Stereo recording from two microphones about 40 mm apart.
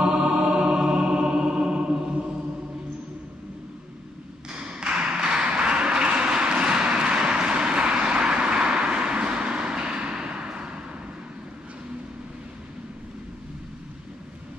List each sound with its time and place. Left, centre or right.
0.0 s music: right
4.5 s tap: right